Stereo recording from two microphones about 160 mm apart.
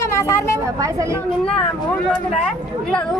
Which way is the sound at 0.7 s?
20° right (ahead or behind).